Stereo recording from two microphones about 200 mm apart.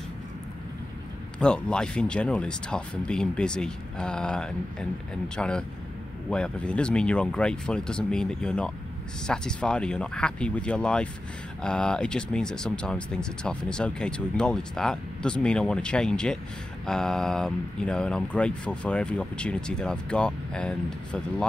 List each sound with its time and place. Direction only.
1.4 s speech: 5° left (ahead or behind)